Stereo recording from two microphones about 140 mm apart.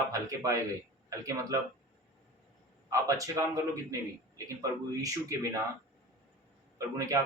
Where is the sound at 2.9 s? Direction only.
25° right (ahead or behind).